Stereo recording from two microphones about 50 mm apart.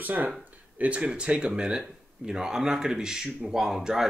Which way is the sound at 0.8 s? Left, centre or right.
Right.